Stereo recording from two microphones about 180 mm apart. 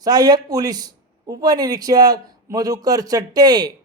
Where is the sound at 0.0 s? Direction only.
20° right (ahead or behind).